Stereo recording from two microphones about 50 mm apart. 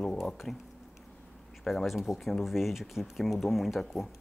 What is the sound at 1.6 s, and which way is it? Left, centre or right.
Speech, centre.